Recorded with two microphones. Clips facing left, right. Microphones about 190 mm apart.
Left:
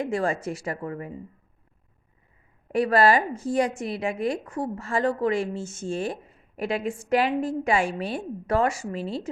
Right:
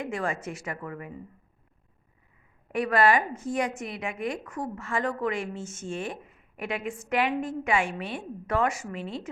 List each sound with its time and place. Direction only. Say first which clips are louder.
0.0 s a woman's voice: left 5 dB; 30° left (ahead or behind)
2.7 s a woman's voice: left 3 dB; 35° left (ahead or behind)